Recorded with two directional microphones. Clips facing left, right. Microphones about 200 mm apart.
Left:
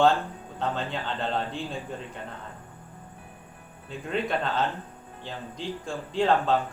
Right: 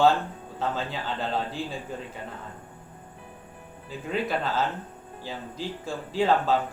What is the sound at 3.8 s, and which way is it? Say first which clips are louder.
Speech: even; 5° right (ahead or behind).